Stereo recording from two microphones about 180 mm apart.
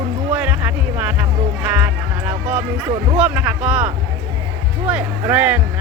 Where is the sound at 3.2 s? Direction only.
5° right (ahead or behind).